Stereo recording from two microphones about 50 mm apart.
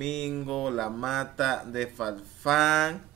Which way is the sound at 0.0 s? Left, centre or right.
Centre.